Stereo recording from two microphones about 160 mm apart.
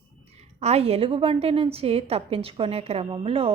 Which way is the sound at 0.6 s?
40° right (ahead or behind).